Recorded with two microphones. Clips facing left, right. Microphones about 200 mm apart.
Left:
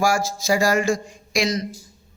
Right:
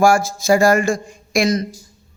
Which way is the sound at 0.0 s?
50° right (ahead or behind).